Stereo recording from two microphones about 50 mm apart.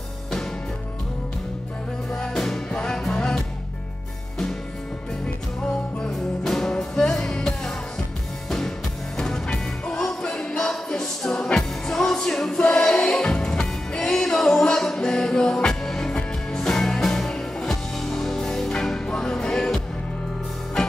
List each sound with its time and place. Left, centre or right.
2.0 s music: centre
6.1 s music: centre